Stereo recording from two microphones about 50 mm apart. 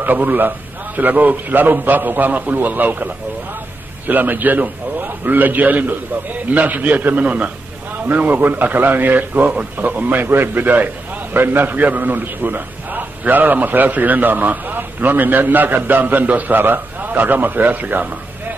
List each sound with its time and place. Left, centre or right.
0.0 s a man's voice: right
4.1 s a man's voice: right